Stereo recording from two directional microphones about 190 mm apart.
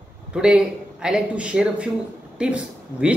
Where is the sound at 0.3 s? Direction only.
5° right (ahead or behind).